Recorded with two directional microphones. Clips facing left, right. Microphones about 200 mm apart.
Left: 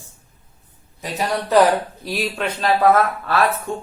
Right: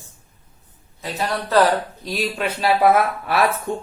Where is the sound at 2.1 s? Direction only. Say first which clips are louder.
Even; centre (ahead or behind); by 3.8 s 20° right (ahead or behind).